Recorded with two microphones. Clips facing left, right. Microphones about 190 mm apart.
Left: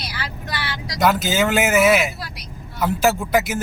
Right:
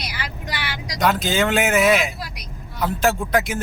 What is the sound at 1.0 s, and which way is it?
Speech, 5° left (ahead or behind).